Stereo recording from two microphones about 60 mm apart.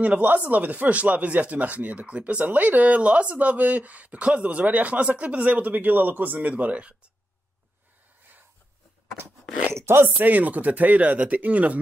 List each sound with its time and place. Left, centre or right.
0.0 s speech: right
9.8 s a sound: right
10.0 s speech: right